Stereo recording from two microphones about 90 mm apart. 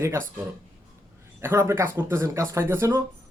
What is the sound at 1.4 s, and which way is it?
Speech, 25° right (ahead or behind).